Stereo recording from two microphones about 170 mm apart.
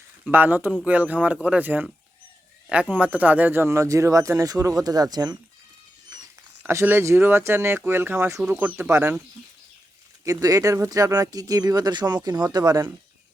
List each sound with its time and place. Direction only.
0.3 s speech: 10° right (ahead or behind)
6.6 s speech: 15° right (ahead or behind)
10.2 s speech: 20° right (ahead or behind)